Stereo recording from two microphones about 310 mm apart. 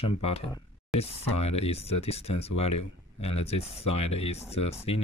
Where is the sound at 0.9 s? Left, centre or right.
Centre.